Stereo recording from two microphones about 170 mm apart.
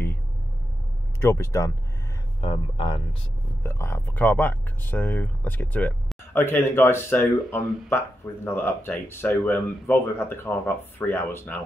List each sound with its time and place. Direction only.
1.2 s speech: 15° left (ahead or behind)
2.4 s speech: 30° left (ahead or behind)
3.6 s speech: 15° left (ahead or behind)